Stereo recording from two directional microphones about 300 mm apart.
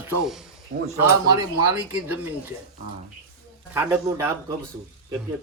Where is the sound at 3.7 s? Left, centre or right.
Centre.